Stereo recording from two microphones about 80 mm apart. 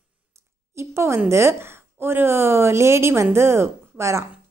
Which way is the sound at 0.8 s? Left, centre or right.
Right.